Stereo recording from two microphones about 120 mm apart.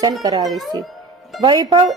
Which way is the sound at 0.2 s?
30° right (ahead or behind).